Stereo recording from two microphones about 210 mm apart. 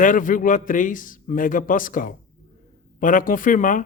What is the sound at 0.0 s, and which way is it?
A man's voice, 40° left (ahead or behind).